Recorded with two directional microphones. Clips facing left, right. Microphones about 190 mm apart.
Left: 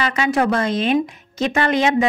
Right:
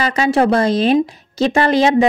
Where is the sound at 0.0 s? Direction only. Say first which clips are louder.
Right 4 dB; 35° right (ahead or behind).